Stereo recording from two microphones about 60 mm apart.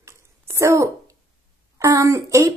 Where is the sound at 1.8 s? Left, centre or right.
Right.